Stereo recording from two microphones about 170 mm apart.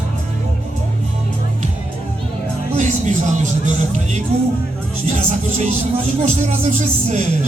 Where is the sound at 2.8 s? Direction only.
45° right (ahead or behind).